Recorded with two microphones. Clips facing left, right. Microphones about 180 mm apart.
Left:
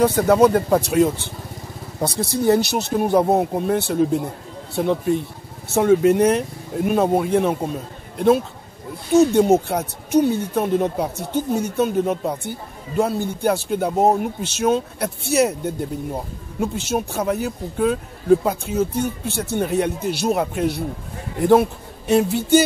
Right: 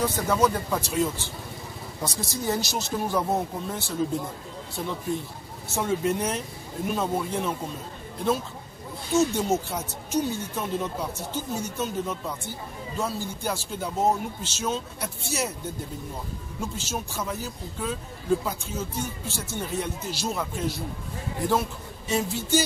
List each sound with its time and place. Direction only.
0.0 s a man's voice: 60° left (ahead or behind)